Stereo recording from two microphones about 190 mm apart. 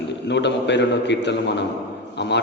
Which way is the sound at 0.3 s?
65° left (ahead or behind).